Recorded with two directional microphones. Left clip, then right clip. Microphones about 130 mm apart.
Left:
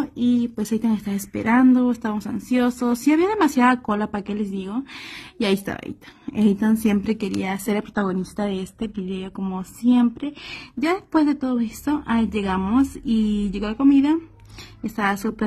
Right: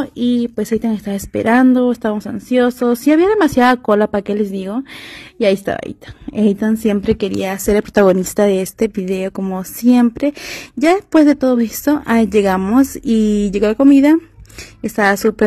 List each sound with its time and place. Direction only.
0.0 s speech: 40° right (ahead or behind)
7.9 s speech: 50° right (ahead or behind)
9.4 s speech: 25° right (ahead or behind)